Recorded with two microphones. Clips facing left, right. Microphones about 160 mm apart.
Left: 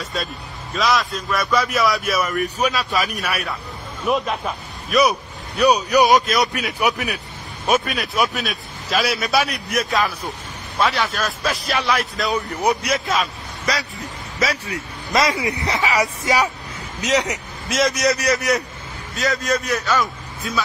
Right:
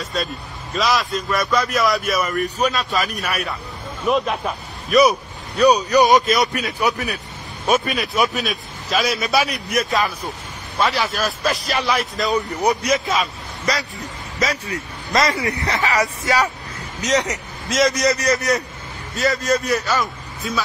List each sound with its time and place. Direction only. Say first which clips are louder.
0.0 s a man's voice: right 2 dB; centre (ahead or behind)
6.1 s a man's voice: right 1 dB; centre (ahead or behind)
6.8 s speech: even; 10° left (ahead or behind)
7.6 s a man's voice: right 1 dB; centre (ahead or behind)
15.4 s speech: even; 20° left (ahead or behind)
17.2 s a man's voice: even; 5° left (ahead or behind)